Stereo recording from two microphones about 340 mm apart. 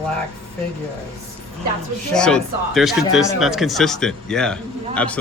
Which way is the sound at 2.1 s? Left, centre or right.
Centre.